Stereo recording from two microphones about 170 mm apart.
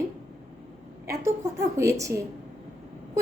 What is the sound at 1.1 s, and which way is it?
A woman's voice, 15° right (ahead or behind).